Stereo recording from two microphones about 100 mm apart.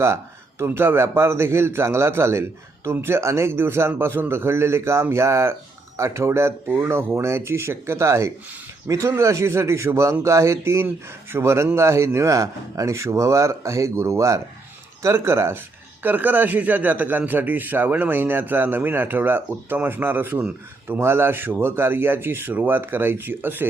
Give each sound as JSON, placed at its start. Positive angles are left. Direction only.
{"t": 0.6, "sound": "speech", "side_deg": -25}